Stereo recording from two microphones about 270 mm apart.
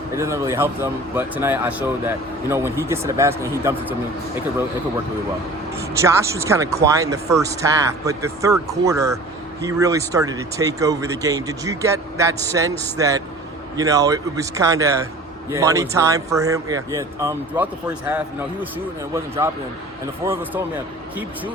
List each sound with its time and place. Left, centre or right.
0.2 s speech: centre
6.0 s speech: centre
19.4 s speech: centre